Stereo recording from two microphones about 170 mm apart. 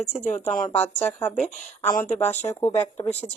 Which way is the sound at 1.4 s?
45° left (ahead or behind).